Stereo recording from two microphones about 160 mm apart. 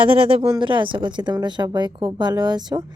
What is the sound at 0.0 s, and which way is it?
Speech, 35° right (ahead or behind).